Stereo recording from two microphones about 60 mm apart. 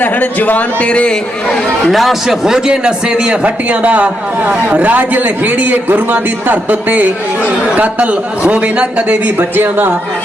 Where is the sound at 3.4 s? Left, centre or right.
Right.